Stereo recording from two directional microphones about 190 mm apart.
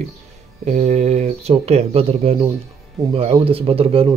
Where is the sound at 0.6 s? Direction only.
35° right (ahead or behind).